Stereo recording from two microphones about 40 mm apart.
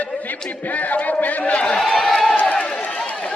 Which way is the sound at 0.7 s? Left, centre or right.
Left.